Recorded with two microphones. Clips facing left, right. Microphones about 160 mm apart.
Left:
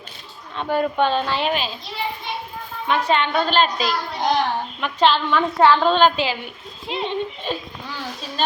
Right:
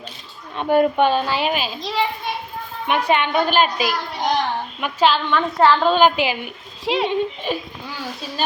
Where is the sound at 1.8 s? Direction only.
90° right.